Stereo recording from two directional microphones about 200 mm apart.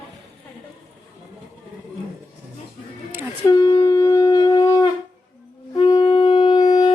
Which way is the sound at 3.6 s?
15° left (ahead or behind).